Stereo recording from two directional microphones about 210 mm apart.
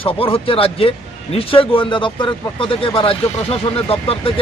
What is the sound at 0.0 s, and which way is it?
Speech, 25° left (ahead or behind).